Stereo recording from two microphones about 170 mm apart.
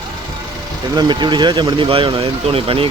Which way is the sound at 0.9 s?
25° right (ahead or behind).